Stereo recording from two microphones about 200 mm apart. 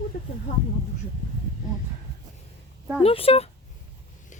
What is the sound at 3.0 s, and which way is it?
Speech, 30° left (ahead or behind).